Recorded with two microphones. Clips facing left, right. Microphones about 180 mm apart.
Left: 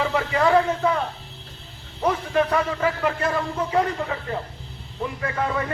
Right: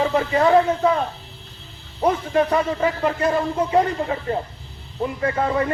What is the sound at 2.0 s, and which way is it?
A man's voice, 30° right (ahead or behind).